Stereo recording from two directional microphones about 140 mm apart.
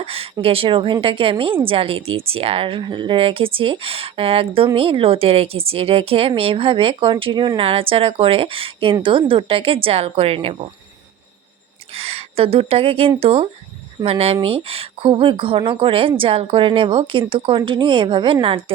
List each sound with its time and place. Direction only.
0.0 s speech: 45° right (ahead or behind)
11.9 s speech: 45° right (ahead or behind)